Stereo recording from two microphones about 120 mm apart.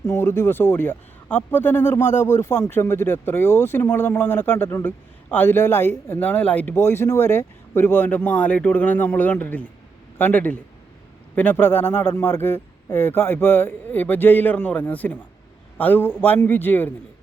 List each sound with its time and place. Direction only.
0.0 s speech: 25° left (ahead or behind)